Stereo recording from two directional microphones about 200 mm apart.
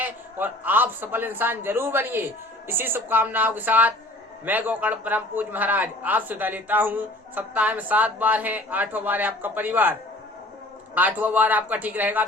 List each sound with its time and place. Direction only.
0.0 s a man's voice: 10° right (ahead or behind)
10.9 s a man's voice: 10° right (ahead or behind)